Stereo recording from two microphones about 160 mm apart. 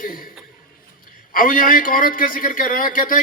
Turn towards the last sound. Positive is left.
turn(degrees=60)  # may be behind; listen again after turning